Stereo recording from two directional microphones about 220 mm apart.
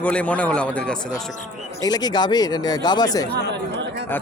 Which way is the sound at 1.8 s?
20° left (ahead or behind).